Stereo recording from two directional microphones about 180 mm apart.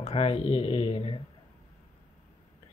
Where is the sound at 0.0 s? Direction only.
35° left (ahead or behind).